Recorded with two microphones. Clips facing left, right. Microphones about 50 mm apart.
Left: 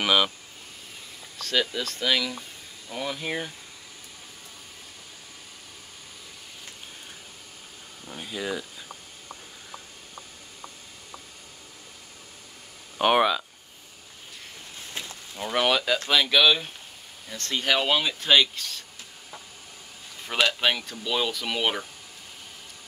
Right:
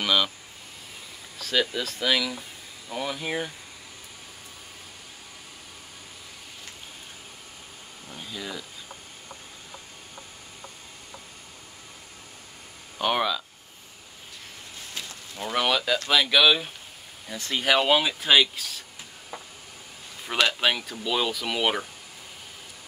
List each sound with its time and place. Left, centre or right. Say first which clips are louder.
0.0 s speech: left 2 dB; centre
1.4 s speech: right 1 dB; centre
8.1 s speech: left 5 dB; centre
12.9 s speech: left 4 dB; left
15.0 s a sound: left 1 dB; left
15.3 s speech: left 1 dB; centre
20.3 s speech: even; centre